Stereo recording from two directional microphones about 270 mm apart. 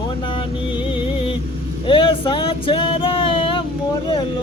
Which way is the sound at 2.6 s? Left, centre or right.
Centre.